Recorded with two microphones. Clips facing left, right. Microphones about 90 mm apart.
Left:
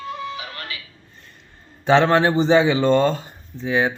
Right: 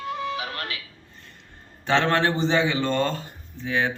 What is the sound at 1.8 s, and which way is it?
A man's voice, 15° left (ahead or behind).